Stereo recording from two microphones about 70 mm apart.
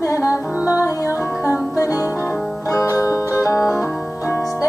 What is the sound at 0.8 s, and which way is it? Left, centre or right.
Music, left.